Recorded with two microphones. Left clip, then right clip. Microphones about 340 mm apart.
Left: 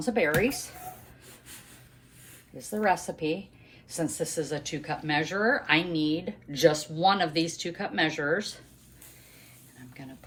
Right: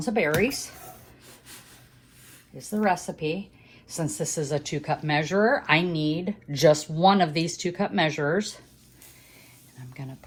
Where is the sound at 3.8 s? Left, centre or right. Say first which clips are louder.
Right 1 dB; centre.